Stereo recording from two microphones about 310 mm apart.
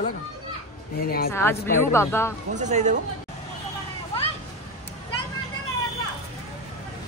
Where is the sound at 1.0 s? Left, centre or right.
Left.